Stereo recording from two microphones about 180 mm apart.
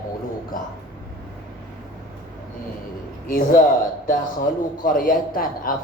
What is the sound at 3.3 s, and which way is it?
Speech, 50° left (ahead or behind).